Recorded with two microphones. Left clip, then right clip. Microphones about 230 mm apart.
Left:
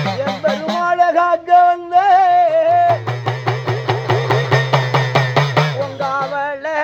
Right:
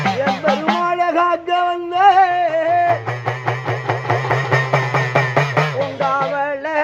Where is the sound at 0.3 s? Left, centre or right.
Left.